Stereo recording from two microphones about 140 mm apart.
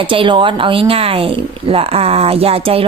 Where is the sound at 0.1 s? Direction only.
35° right (ahead or behind).